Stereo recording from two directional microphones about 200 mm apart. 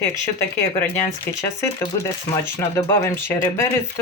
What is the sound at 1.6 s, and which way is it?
Speech, 15° left (ahead or behind).